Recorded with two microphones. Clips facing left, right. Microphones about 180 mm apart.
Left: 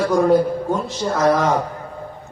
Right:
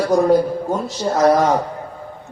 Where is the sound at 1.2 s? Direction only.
45° right (ahead or behind).